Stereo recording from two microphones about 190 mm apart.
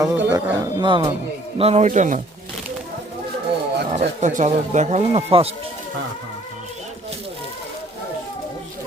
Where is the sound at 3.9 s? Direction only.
35° right (ahead or behind).